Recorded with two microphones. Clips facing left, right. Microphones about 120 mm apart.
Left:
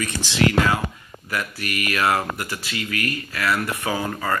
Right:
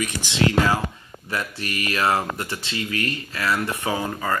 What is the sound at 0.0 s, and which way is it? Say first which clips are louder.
Speech: left 1 dB; 20° right (ahead or behind).